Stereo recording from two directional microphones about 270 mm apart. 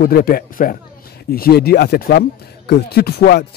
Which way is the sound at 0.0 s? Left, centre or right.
Left.